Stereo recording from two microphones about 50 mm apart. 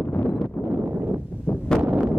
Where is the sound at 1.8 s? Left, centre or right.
Right.